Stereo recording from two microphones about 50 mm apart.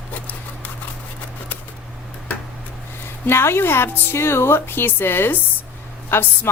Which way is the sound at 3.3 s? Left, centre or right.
Left.